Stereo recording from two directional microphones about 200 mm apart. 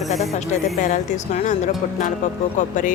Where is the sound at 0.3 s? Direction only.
35° left (ahead or behind).